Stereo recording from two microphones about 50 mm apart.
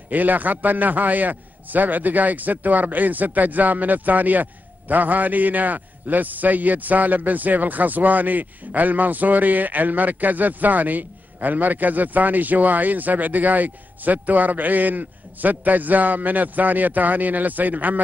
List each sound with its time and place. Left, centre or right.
0.1 s a man's voice: right